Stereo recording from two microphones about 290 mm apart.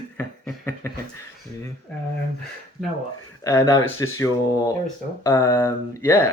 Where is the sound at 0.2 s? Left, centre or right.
Centre.